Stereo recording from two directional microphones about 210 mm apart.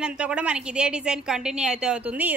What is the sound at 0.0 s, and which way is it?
A woman's voice, 5° right (ahead or behind).